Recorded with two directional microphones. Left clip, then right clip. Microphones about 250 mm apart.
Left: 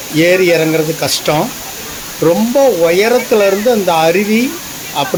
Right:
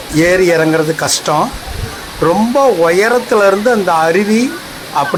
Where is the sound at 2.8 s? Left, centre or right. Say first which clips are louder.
Even; centre.